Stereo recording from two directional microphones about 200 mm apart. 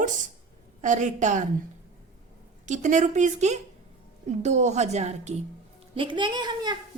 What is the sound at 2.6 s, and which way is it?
A woman's voice, 40° right (ahead or behind).